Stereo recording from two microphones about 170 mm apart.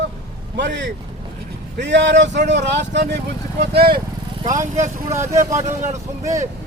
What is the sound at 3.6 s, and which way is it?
Speech, 70° right (ahead or behind).